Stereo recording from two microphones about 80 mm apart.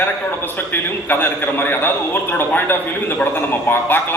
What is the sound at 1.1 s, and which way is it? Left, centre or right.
A man's voice, left.